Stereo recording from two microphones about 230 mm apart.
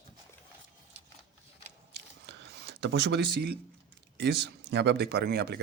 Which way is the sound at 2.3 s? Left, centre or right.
Right.